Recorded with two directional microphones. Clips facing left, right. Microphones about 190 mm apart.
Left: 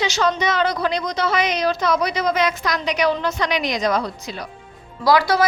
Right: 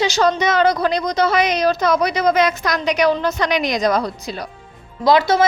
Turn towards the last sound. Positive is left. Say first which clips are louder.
# right 2 dB
turn(degrees=-25)  # may be behind; listen again after turning